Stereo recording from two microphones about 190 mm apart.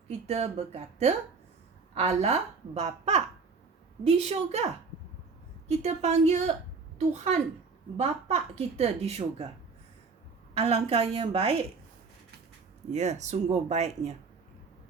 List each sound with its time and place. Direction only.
0.1 s a woman's voice: 35° right (ahead or behind)
7.9 s a woman's voice: 35° right (ahead or behind)
10.5 s a woman's voice: 30° right (ahead or behind)
12.9 s a woman's voice: 35° right (ahead or behind)